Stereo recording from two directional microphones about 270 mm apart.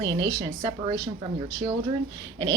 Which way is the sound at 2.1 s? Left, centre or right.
Centre.